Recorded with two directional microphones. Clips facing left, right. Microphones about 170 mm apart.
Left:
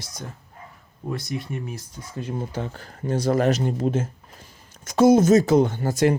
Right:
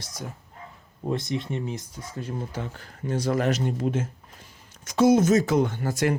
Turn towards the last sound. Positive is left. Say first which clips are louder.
# left 4 dB
turn(degrees=30)  # may be behind; listen again after turning